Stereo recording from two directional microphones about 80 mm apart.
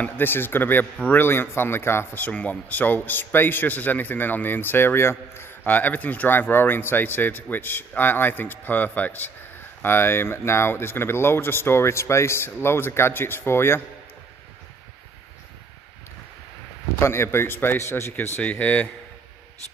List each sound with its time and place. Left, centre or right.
0.0 s a man's voice: left
2.2 s a man's voice: centre
17.0 s speech: left
18.1 s a man's voice: left